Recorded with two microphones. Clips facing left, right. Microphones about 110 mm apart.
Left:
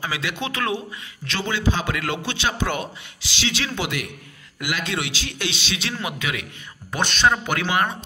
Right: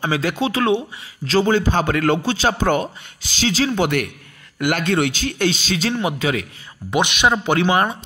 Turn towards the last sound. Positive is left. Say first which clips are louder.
# right 6 dB
turn(degrees=-30)  # may be behind; listen again after turning